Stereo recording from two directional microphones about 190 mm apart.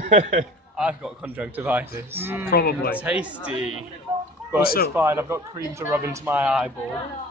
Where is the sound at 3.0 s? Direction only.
5° right (ahead or behind).